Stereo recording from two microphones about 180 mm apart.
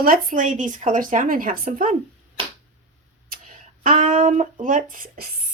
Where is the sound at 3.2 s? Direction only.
50° right (ahead or behind).